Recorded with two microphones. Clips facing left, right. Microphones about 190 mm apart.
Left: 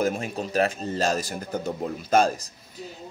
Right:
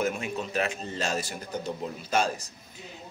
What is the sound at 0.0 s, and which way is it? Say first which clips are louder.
A man's voice: left 3 dB; 35° left (ahead or behind).